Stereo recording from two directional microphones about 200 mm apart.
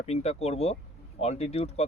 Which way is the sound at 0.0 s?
30° left (ahead or behind).